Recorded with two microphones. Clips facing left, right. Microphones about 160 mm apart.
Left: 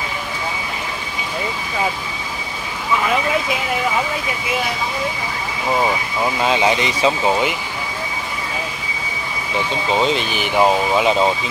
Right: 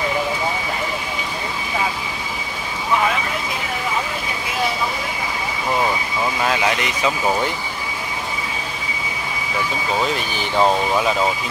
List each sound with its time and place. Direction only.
6.2 s speech: 20° left (ahead or behind)
7.2 s speech: 15° left (ahead or behind)
9.9 s speech: 25° left (ahead or behind); by 11.0 s 5° left (ahead or behind)
11.0 s speech: 25° left (ahead or behind)